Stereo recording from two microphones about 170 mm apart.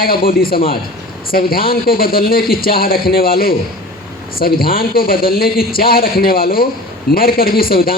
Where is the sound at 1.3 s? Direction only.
60° left (ahead or behind).